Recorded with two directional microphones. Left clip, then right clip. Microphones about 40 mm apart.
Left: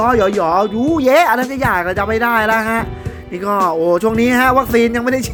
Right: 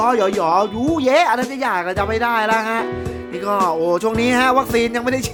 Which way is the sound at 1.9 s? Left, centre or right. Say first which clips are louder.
Left 3 dB; left.